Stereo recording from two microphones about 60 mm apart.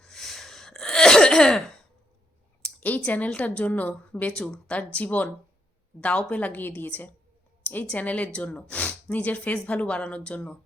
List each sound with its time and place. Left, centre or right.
0.0 s throat clearing: centre
2.8 s speech: left
7.6 s a sound: left
7.9 s speech: left